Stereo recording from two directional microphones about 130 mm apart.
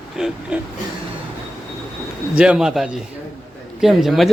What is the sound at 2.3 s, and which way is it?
Speech, 5° right (ahead or behind).